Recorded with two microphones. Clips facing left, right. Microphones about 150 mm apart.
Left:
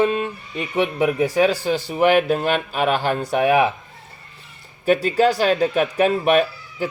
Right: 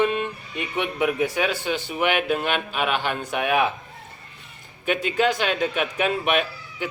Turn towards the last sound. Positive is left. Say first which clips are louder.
# left 6 dB
turn(degrees=35)  # may be behind; listen again after turning